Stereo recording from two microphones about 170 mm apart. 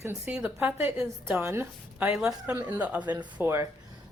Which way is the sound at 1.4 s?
15° right (ahead or behind).